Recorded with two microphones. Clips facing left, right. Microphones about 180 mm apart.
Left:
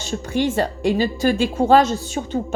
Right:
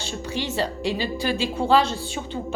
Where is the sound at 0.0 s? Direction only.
50° left (ahead or behind).